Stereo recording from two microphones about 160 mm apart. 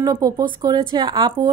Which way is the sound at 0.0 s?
25° right (ahead or behind).